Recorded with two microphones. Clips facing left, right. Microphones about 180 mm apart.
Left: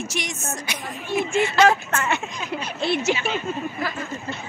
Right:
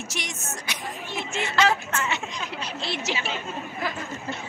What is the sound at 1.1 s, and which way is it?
Speech, 55° left (ahead or behind).